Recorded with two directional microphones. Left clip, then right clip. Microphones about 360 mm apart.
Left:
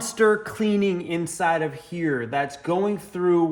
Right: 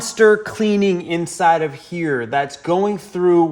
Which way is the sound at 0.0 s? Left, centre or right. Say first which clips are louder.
Right 7 dB; right.